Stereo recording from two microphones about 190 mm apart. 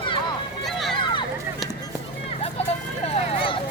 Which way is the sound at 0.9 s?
25° left (ahead or behind).